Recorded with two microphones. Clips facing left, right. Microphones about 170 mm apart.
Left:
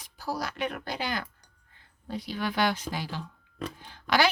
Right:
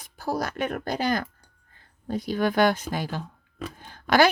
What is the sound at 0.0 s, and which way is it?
A woman's voice, 50° right (ahead or behind).